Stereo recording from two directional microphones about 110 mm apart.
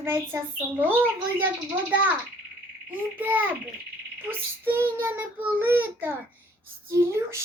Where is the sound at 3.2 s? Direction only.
15° right (ahead or behind).